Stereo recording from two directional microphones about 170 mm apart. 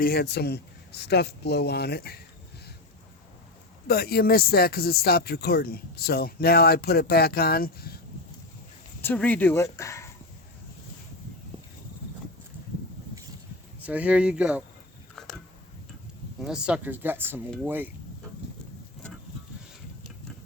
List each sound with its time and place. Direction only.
0.0 s speech: 65° left (ahead or behind)
3.8 s speech: 65° left (ahead or behind)
9.0 s speech: 10° left (ahead or behind)
13.8 s speech: 10° right (ahead or behind)
16.4 s speech: 5° right (ahead or behind)